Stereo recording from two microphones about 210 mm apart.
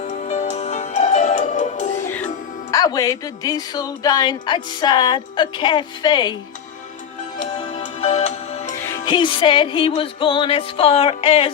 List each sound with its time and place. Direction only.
0.0 s music: 35° left (ahead or behind)
2.7 s speech: 15° left (ahead or behind)
7.6 s music: 30° left (ahead or behind)
9.0 s speech: 20° left (ahead or behind)